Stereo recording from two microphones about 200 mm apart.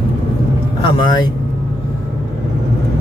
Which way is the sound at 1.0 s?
20° left (ahead or behind).